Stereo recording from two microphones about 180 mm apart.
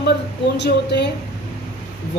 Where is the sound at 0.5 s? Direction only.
70° left (ahead or behind).